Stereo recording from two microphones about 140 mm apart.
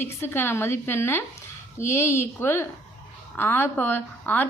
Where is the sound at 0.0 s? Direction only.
15° left (ahead or behind).